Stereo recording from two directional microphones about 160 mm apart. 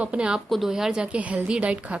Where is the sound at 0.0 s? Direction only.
5° right (ahead or behind).